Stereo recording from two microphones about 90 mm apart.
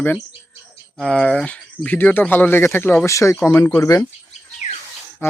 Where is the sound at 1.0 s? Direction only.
10° left (ahead or behind).